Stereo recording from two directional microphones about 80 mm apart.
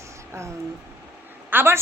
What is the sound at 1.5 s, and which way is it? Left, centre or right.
Speech, right.